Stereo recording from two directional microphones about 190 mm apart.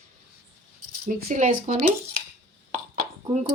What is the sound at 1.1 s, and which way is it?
Speech, 50° right (ahead or behind).